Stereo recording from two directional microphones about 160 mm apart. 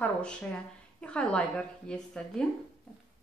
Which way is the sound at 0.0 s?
5° left (ahead or behind).